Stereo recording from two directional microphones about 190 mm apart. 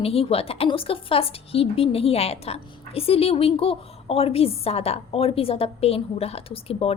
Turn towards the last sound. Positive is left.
turn(degrees=30)  # may be behind; listen again after turning